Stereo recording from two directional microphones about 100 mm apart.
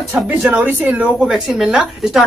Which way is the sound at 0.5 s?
15° right (ahead or behind).